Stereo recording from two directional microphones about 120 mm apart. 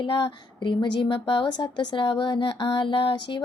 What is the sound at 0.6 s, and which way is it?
Speech, 40° left (ahead or behind).